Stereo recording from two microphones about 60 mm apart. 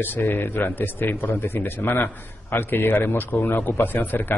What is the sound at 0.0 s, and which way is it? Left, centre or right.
A man's voice, left.